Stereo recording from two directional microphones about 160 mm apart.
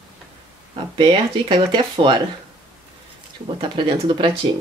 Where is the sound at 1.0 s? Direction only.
35° right (ahead or behind).